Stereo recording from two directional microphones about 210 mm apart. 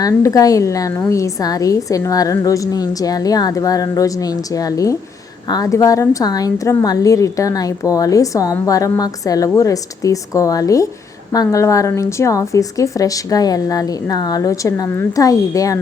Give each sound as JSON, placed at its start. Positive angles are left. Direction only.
{"t": 0.0, "sound": "a woman's voice", "side_deg": 15}